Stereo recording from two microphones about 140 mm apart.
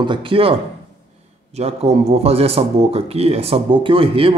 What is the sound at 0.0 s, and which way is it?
Speech, 35° right (ahead or behind).